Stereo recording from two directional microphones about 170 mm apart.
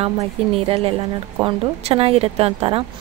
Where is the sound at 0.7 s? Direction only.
35° right (ahead or behind).